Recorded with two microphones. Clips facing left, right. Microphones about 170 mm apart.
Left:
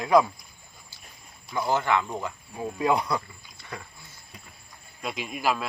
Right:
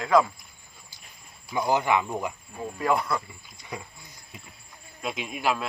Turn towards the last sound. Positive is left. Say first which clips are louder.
# even
turn(degrees=0)  # may be behind; listen again after turning